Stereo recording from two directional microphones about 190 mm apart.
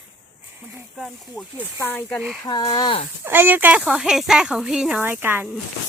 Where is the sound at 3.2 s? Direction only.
10° right (ahead or behind).